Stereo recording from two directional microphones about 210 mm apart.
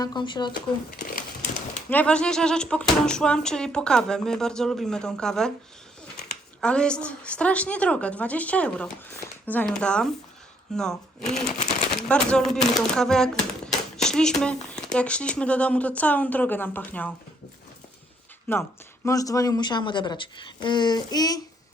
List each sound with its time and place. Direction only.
0.0 s a woman's voice: 20° left (ahead or behind)
0.5 s speech: 45° left (ahead or behind)
1.9 s speech: 5° left (ahead or behind)
19.0 s a woman's voice: 15° left (ahead or behind)